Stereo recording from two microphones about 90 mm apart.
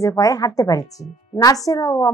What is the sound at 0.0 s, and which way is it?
A woman's voice, 35° left (ahead or behind).